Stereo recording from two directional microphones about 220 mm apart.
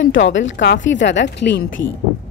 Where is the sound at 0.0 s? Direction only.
60° left (ahead or behind).